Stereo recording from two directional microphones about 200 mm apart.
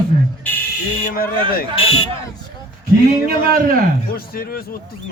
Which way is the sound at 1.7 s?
30° left (ahead or behind).